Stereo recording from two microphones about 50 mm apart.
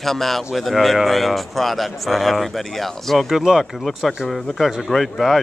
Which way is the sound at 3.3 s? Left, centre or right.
Centre.